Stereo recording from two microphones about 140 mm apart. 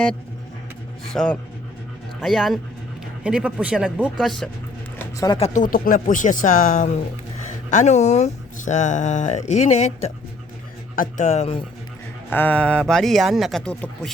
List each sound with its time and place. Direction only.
1.1 s speech: 5° left (ahead or behind)
4.9 s a sound: 25° left (ahead or behind)
5.5 s speech: 75° left (ahead or behind); by 10.1 s 50° left (ahead or behind)
10.9 s speech: 80° left
11.3 s speech: 45° left (ahead or behind)
12.3 s speech: 10° left (ahead or behind)